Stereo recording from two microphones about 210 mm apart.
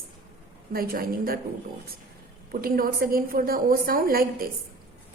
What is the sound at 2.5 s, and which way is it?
A woman's voice, 45° right (ahead or behind).